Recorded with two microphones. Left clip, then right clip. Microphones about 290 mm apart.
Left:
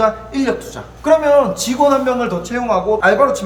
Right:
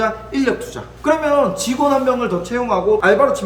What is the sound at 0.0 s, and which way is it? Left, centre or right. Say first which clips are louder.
A man's voice: left 2 dB; centre.